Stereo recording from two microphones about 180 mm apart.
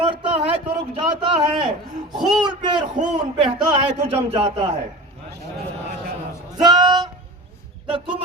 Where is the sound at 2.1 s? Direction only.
Centre (ahead or behind).